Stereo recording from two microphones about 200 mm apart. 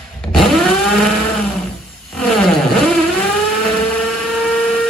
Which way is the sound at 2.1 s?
Centre (ahead or behind).